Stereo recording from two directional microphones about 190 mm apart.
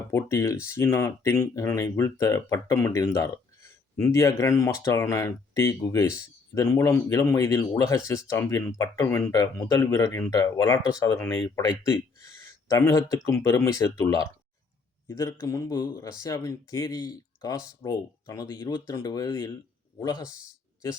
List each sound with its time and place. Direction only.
0.1 s speech: 15° left (ahead or behind)